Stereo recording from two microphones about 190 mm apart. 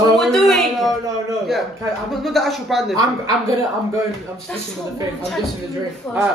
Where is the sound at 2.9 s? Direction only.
20° right (ahead or behind).